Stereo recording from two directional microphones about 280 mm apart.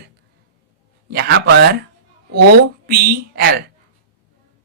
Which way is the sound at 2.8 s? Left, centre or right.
Right.